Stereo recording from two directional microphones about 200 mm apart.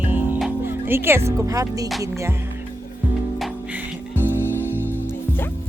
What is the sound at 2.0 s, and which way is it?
Speech, 15° right (ahead or behind).